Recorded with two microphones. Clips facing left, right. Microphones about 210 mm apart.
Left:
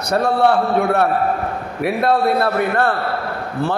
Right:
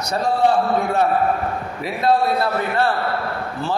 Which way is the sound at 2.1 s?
55° left (ahead or behind).